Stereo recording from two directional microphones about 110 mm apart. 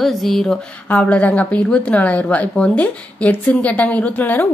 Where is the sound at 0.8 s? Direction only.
10° left (ahead or behind).